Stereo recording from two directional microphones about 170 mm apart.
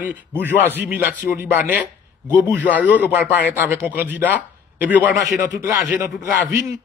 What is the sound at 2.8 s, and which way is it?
Speech, 10° right (ahead or behind).